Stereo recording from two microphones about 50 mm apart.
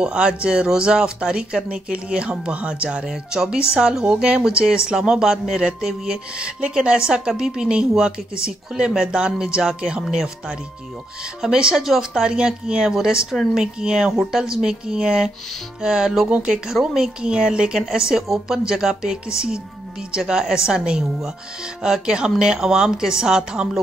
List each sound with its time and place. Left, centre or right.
0.0 s speech: centre
3.1 s speech: centre
6.3 s speech: right
11.4 s speech: centre